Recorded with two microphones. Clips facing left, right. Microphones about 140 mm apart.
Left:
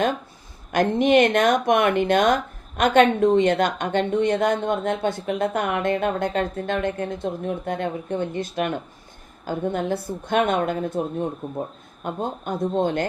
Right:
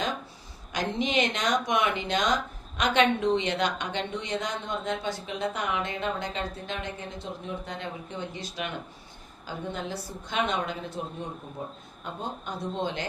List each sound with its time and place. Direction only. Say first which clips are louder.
0.7 s a woman's voice: left 11 dB; 55° left (ahead or behind)